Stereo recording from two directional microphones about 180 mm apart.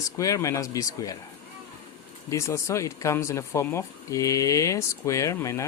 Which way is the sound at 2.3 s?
15° left (ahead or behind).